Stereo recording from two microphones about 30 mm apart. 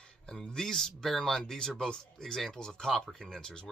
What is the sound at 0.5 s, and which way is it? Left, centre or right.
A man's voice, centre.